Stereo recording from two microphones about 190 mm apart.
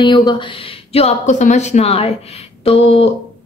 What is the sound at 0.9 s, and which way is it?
A woman's voice, 35° left (ahead or behind).